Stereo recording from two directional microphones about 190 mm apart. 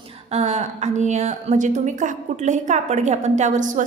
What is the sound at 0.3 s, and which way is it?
A woman's voice, 35° right (ahead or behind).